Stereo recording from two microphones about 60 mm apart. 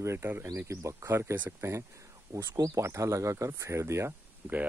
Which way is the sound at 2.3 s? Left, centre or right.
Right.